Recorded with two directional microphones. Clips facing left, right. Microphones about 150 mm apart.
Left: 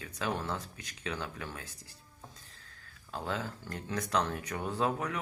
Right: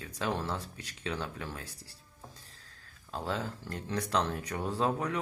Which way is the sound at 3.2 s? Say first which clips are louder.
Right 1 dB; 30° right (ahead or behind).